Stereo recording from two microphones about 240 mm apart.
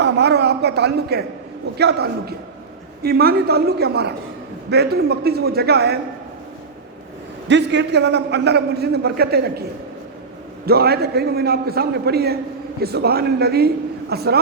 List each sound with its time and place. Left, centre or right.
0.0 s a woman's voice: right
7.4 s a man's voice: right
10.7 s a man's voice: right